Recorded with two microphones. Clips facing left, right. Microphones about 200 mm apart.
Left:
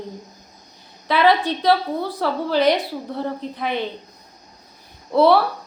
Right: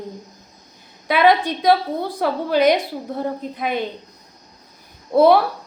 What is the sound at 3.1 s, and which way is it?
Speech, 45° right (ahead or behind).